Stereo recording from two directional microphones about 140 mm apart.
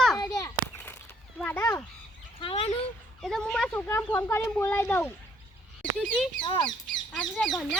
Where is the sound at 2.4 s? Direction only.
35° left (ahead or behind).